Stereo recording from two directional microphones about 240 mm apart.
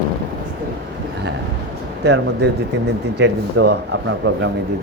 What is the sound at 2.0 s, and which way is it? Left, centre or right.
Speech, right.